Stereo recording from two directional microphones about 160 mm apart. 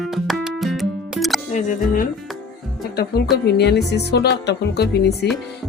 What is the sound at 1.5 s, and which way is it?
Music, 50° left (ahead or behind).